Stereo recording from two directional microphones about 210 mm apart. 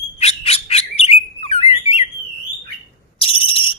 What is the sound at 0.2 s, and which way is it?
Bird, 30° left (ahead or behind).